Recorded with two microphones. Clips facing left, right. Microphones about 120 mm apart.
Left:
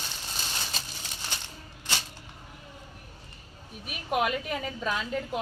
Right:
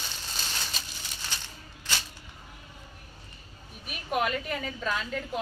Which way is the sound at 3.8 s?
15° left (ahead or behind).